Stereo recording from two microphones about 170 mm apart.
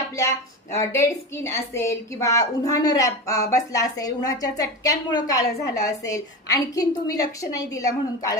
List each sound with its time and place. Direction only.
0.7 s a woman's voice: 15° left (ahead or behind)